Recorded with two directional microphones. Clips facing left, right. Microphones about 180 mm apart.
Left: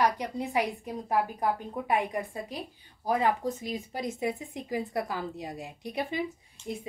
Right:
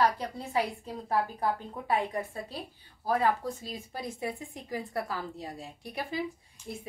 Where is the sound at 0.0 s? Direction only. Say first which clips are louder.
Left 1 dB; 15° left (ahead or behind).